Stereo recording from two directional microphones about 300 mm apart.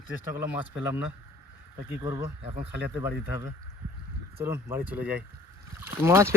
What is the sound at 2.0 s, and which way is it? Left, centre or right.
Speech, centre.